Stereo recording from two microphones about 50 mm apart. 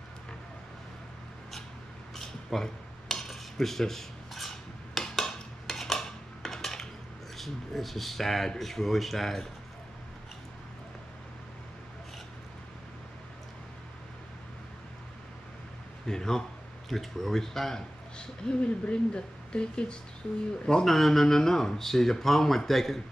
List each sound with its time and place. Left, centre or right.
2.1 s cutlery: centre
4.9 s dishes: centre
7.3 s speech: centre
16.1 s speech: centre
18.6 s speech: left
20.6 s speech: centre